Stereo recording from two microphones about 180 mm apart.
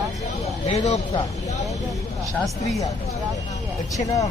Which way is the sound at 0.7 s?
35° left (ahead or behind).